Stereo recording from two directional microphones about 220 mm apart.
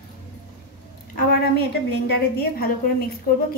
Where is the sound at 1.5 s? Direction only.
45° left (ahead or behind).